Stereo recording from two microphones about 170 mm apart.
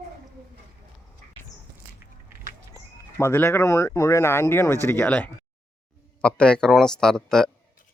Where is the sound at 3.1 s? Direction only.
15° left (ahead or behind).